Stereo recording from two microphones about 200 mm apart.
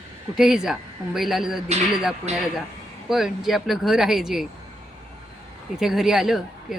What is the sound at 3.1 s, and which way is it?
Speech, centre (ahead or behind).